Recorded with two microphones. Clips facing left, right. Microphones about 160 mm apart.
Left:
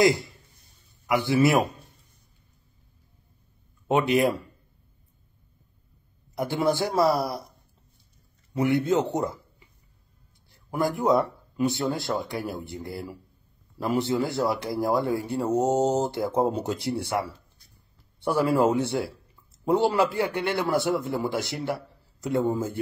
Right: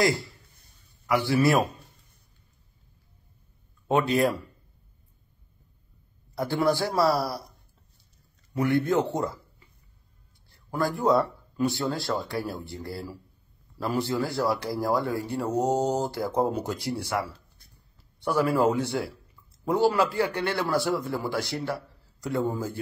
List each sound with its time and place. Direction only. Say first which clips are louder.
0.0 s speech: left 4 dB; 20° left (ahead or behind)
3.8 s speech: left 1 dB; 20° left (ahead or behind)
6.3 s speech: even; 20° left (ahead or behind)
8.5 s a man's voice: left 1 dB; 20° left (ahead or behind)